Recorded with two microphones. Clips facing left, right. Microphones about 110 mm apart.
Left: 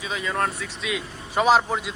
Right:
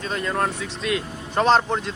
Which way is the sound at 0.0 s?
Centre (ahead or behind).